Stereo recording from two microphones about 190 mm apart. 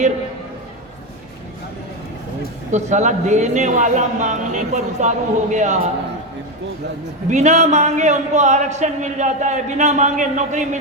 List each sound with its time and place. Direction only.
2.7 s a man's voice: 40° right (ahead or behind)
7.3 s a man's voice: 40° right (ahead or behind)